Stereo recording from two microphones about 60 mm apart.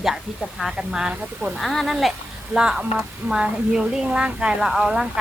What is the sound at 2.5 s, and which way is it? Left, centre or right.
Speech, centre.